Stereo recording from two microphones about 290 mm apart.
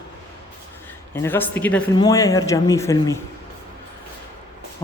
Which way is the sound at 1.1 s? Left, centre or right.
Centre.